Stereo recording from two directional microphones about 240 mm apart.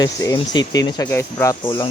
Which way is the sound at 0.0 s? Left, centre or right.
Centre.